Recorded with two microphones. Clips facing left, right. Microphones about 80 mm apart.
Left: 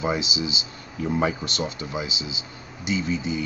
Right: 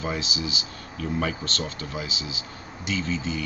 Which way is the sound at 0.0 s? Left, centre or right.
Centre.